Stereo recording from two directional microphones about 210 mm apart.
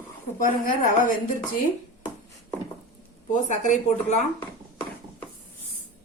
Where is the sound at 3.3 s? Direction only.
35° left (ahead or behind).